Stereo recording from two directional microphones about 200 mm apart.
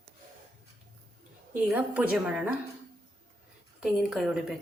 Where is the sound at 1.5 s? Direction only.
5° right (ahead or behind).